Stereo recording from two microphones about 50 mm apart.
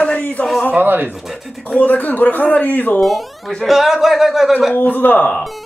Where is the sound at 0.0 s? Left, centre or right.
Left.